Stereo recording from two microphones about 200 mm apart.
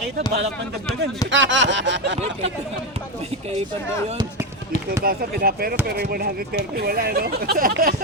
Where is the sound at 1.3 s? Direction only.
65° right (ahead or behind).